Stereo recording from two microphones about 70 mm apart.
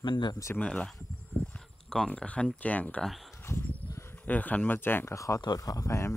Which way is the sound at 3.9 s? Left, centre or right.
Left.